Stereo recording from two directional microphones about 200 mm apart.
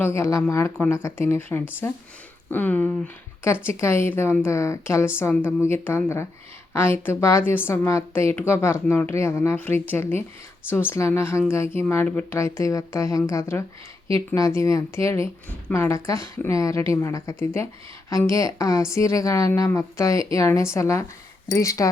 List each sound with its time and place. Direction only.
0.0 s a woman's voice: 15° left (ahead or behind)